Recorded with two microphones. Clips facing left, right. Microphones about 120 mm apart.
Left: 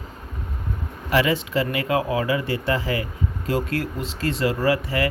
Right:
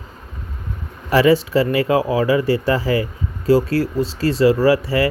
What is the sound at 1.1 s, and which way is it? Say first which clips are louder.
Speech: right 7 dB; 35° right (ahead or behind).